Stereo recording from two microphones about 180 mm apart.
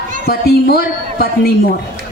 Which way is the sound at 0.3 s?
60° left (ahead or behind).